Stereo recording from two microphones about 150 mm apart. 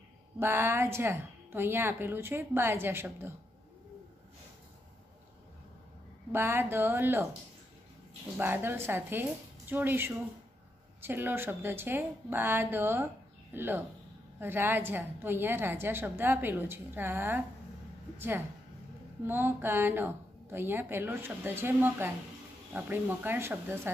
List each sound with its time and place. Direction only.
0.4 s a woman's voice: 15° right (ahead or behind)
6.3 s a woman's voice: 15° right (ahead or behind)
8.4 s a woman's voice: 15° right (ahead or behind)